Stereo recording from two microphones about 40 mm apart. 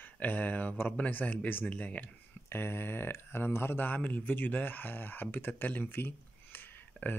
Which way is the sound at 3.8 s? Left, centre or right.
Left.